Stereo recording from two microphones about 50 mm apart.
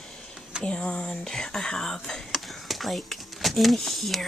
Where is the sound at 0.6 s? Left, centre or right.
Left.